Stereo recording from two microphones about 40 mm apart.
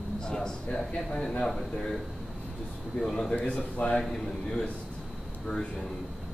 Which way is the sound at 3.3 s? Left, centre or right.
Left.